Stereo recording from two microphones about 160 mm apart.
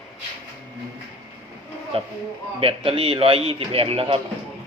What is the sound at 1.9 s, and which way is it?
A man's voice, 35° right (ahead or behind).